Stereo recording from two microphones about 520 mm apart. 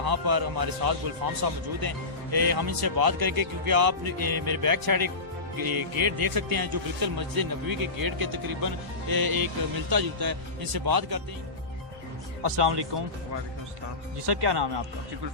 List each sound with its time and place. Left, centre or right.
0.0 s speech: right
12.4 s speech: right
14.3 s speech: right